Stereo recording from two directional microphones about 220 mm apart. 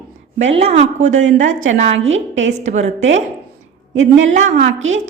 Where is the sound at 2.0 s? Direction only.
60° right (ahead or behind).